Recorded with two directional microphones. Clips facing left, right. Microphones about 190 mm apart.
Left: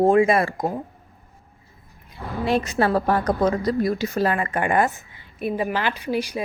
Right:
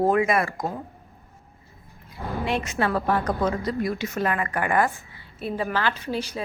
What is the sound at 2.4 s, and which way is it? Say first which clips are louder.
A woman's voice: left 5 dB; 35° left (ahead or behind).